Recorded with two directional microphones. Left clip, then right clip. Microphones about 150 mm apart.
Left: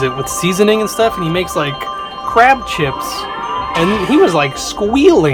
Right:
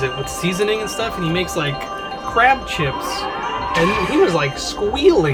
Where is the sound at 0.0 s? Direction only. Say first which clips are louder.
Left 5 dB; 50° left (ahead or behind).